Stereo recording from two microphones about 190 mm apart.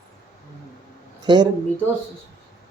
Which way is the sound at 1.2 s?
20° right (ahead or behind).